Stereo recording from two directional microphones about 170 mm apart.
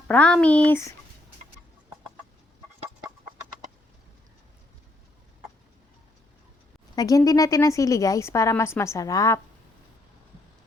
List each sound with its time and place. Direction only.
0.1 s speech: 5° left (ahead or behind)
6.9 s a woman's voice: 20° left (ahead or behind)